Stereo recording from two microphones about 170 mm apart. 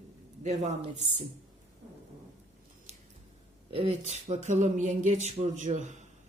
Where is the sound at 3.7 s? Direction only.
35° right (ahead or behind).